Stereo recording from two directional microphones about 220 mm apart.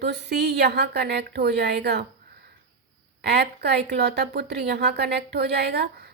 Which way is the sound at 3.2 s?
45° right (ahead or behind).